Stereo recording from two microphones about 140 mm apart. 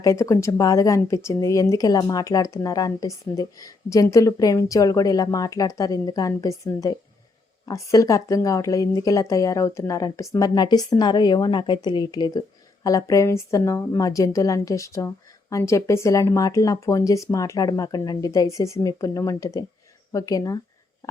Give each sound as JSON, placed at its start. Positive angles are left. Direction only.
{"t": 0.0, "sound": "speech", "side_deg": 20}